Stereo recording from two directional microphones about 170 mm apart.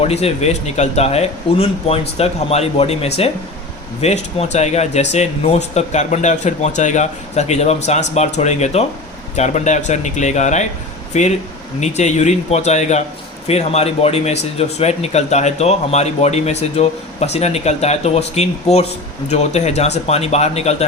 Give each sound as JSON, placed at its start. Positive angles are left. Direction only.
{"t": 0.0, "sound": "speech", "side_deg": 35}